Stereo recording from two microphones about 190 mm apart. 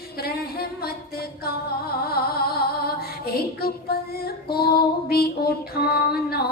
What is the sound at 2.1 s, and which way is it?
Music, 55° left (ahead or behind).